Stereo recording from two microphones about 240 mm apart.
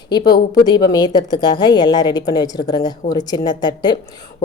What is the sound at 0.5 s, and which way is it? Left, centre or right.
Speech, centre.